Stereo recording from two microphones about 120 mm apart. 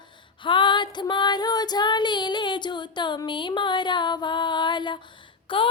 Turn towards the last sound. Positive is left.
turn(degrees=45)  # may be behind; listen again after turning